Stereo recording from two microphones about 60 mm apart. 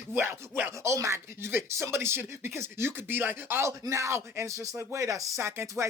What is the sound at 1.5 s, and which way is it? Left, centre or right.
Speech, right.